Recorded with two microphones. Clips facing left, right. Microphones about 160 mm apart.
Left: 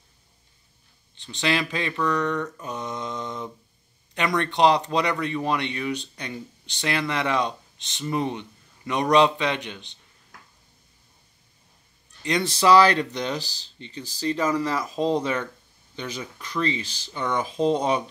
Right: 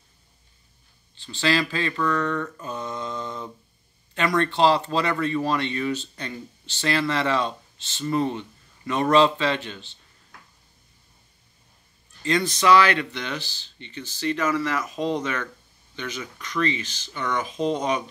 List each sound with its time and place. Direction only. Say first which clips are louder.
1.1 s speech: right 2 dB; 20° left (ahead or behind)
2.6 s mantra: even; 20° left (ahead or behind)
4.4 s speech: even; 15° left (ahead or behind)
12.2 s speech: right 2 dB; 20° left (ahead or behind)
12.4 s speech: left 2 dB; 35° left (ahead or behind)